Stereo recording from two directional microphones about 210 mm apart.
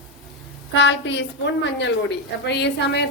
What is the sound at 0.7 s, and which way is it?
A woman's voice, 60° left (ahead or behind).